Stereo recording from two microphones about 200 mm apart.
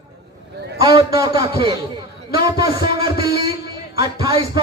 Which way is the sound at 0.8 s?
20° right (ahead or behind).